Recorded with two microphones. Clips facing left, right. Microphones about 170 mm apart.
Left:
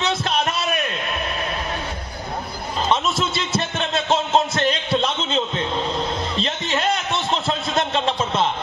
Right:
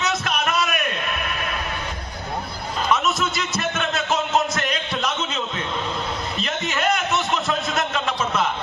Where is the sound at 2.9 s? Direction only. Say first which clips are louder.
Even; 30° left (ahead or behind).